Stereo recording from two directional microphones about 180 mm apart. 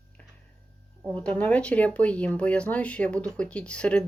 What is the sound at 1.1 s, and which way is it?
Speech, 10° left (ahead or behind).